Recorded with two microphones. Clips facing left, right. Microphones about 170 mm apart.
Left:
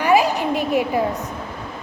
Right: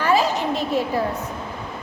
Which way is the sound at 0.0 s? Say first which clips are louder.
Left 3 dB; 15° left (ahead or behind).